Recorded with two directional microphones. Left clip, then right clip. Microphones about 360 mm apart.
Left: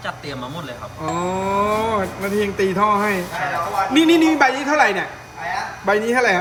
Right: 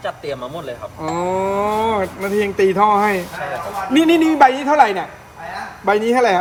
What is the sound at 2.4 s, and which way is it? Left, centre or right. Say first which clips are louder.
A man's voice: right 4 dB; right.